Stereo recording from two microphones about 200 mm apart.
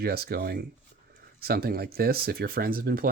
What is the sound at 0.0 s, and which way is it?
Speech, 50° right (ahead or behind).